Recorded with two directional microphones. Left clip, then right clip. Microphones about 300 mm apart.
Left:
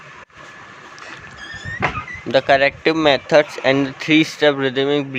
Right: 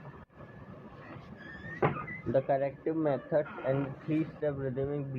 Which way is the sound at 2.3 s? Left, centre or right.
Left.